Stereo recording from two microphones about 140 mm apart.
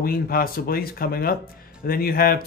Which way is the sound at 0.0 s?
90° left.